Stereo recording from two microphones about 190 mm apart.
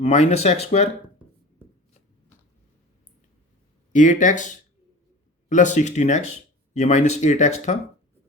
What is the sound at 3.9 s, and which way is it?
A man's voice, 40° left (ahead or behind).